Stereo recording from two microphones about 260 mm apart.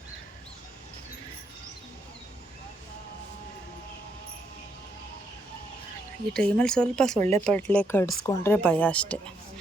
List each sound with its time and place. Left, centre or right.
6.3 s speech: centre
7.2 s speech: right
7.4 s speech: centre